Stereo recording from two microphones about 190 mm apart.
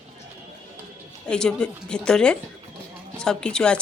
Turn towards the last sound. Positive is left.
turn(degrees=5)  # may be behind; listen again after turning